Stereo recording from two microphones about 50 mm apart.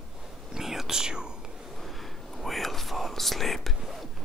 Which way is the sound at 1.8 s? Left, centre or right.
Centre.